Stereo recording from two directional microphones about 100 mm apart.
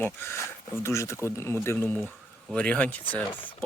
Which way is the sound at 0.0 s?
25° left (ahead or behind).